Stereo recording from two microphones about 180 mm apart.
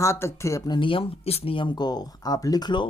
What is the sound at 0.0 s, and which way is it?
Speech, 15° left (ahead or behind).